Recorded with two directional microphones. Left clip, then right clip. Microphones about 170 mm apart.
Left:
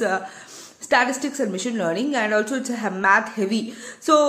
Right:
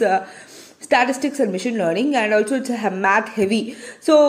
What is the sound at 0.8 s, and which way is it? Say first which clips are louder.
A woman's voice: right 2 dB; 15° right (ahead or behind).